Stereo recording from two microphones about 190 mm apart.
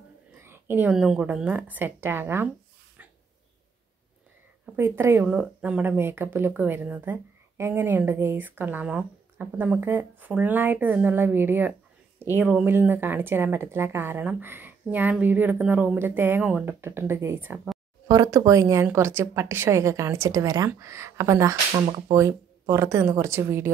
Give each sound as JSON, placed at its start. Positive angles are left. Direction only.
{"t": 0.4, "sound": "speech", "side_deg": -10}
{"t": 4.7, "sound": "speech", "side_deg": -10}
{"t": 21.8, "sound": "speech", "side_deg": -25}
{"t": 22.1, "sound": "speech", "side_deg": -15}